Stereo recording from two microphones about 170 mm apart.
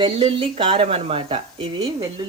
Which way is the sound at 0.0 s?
30° right (ahead or behind).